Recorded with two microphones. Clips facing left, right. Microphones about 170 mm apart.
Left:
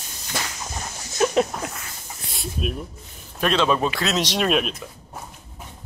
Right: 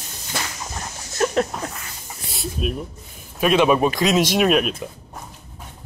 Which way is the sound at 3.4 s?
10° right (ahead or behind).